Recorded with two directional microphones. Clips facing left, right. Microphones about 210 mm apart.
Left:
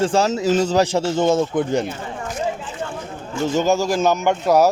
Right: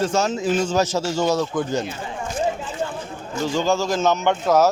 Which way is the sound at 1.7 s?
60° left (ahead or behind).